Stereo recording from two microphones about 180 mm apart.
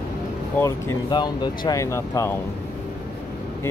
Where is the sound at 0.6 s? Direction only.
20° left (ahead or behind).